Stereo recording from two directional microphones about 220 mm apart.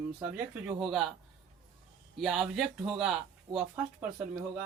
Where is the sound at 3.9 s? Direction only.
5° right (ahead or behind).